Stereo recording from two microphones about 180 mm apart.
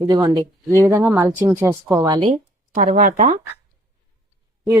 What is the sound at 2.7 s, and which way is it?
Speech, 50° right (ahead or behind).